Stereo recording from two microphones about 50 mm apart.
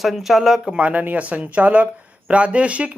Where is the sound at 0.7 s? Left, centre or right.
Right.